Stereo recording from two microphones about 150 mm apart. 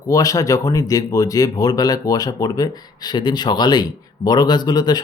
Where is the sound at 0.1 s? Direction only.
25° left (ahead or behind).